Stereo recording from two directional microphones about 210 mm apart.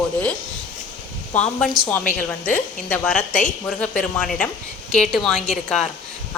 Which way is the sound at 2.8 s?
5° left (ahead or behind).